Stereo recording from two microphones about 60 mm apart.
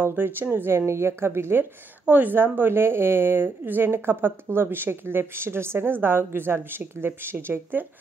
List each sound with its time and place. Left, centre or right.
0.0 s a woman's voice: right
2.0 s a woman's voice: right